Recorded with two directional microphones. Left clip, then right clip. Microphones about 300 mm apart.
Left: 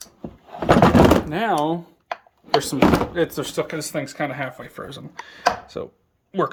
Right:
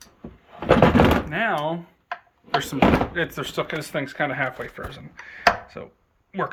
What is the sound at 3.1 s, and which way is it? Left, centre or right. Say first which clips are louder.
Speech: left 3 dB; centre.